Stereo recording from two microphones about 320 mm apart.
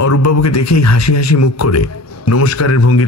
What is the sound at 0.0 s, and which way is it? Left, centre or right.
A man's voice, left.